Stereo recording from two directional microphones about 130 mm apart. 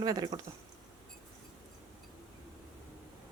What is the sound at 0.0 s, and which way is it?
Speech, 30° right (ahead or behind).